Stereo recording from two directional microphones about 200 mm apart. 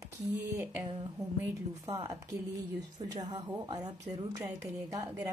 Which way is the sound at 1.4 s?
20° right (ahead or behind).